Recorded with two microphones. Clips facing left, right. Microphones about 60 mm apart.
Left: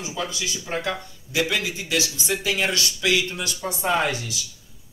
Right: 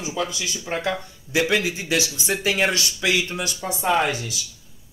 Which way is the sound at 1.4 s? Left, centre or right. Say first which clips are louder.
Right 4 dB; right.